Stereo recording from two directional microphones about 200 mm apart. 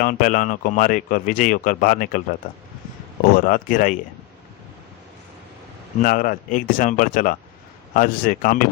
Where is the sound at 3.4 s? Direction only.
45° left (ahead or behind).